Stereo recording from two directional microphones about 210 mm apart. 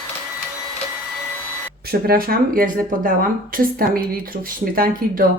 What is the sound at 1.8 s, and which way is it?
Speech, 45° right (ahead or behind).